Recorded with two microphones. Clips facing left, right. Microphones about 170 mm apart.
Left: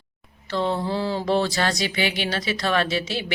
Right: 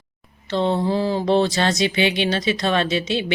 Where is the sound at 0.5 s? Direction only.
20° right (ahead or behind).